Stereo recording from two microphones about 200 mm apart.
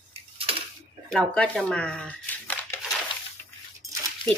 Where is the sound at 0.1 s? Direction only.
30° right (ahead or behind).